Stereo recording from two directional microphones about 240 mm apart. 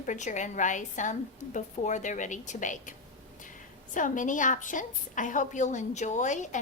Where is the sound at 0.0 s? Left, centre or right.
Left.